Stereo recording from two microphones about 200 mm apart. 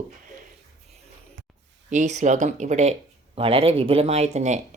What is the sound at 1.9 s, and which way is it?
Speech, 35° right (ahead or behind).